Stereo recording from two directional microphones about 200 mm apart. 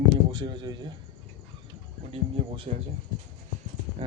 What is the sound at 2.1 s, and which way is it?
Speech, 25° right (ahead or behind).